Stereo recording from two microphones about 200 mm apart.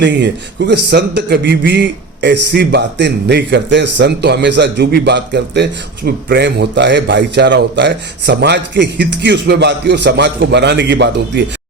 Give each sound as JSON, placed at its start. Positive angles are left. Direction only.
{"t": 0.0, "sound": "a man's voice", "side_deg": -60}